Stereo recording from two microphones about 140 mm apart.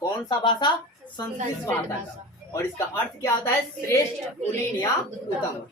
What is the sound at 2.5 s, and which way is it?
Speech, 20° left (ahead or behind).